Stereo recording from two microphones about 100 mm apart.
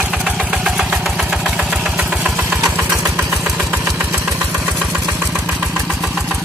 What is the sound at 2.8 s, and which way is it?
Engine, 15° right (ahead or behind).